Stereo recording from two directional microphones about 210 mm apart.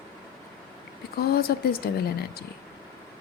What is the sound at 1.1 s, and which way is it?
Speech, 45° left (ahead or behind).